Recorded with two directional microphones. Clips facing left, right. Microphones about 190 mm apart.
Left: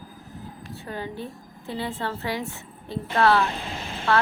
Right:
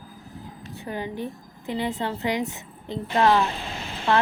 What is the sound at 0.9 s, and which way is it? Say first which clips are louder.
A woman's voice: right 3 dB; 15° right (ahead or behind).